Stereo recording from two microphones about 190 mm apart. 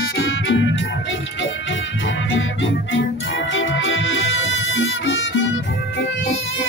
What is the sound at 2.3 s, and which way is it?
Music, 80° left.